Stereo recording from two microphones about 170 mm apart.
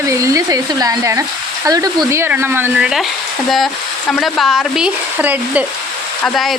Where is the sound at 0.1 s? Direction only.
20° right (ahead or behind); by 3.1 s 5° right (ahead or behind).